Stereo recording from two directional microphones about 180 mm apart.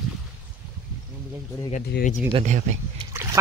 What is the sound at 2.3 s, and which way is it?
Speech, 40° right (ahead or behind).